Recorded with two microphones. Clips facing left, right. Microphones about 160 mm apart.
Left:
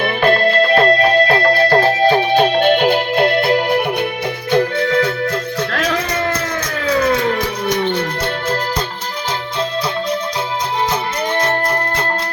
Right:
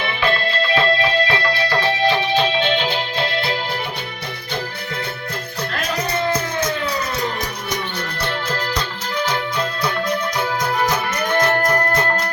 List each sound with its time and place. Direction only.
0.0 s music: 50° left (ahead or behind)
4.5 s music: 90° left; by 7.8 s 60° left (ahead or behind)
11.3 s music: 25° left (ahead or behind)